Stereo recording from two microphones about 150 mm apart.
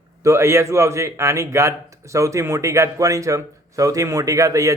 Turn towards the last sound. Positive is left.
turn(degrees=-20)  # may be behind; listen again after turning